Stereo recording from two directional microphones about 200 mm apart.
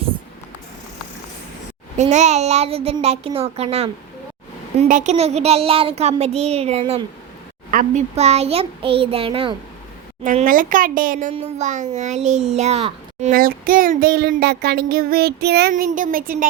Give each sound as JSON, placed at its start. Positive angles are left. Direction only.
{"t": 2.0, "sound": "a child's voice", "side_deg": -35}
{"t": 10.2, "sound": "a child's voice", "side_deg": -40}